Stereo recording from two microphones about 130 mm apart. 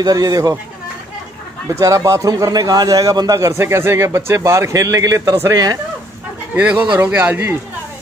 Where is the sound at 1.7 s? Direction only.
25° right (ahead or behind).